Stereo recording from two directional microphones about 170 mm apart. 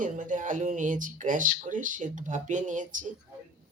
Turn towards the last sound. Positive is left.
turn(degrees=-50)  # may be behind; listen again after turning